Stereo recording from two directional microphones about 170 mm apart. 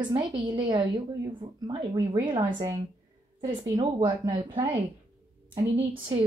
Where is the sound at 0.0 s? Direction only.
25° right (ahead or behind).